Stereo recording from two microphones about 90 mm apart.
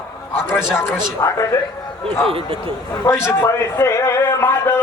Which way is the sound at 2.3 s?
90° right.